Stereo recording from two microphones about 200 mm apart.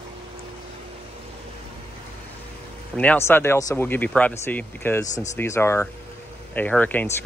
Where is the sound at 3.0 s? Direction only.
10° left (ahead or behind).